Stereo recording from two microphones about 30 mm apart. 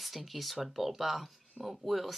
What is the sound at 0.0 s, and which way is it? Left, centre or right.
Speech, centre.